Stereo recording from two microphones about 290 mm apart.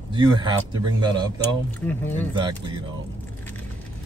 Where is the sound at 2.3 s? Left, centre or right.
Centre.